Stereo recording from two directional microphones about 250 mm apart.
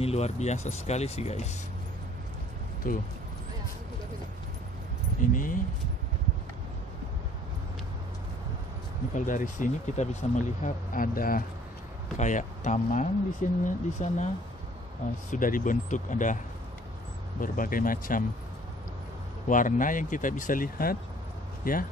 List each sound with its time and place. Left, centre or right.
0.0 s speech: left
2.8 s speech: left
5.3 s speech: left
9.1 s speech: left
15.3 s speech: left
17.4 s speech: left
19.4 s speech: left